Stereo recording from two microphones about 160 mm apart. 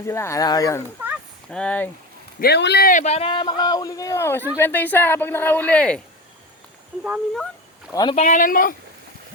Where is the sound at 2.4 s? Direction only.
90° left.